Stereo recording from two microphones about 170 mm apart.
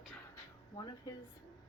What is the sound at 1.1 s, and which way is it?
Speech, 25° left (ahead or behind).